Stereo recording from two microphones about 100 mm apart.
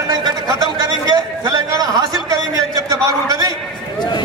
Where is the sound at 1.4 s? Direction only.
40° right (ahead or behind).